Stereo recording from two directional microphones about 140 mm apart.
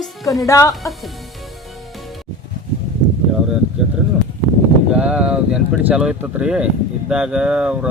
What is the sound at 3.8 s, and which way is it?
Speech, 5° right (ahead or behind).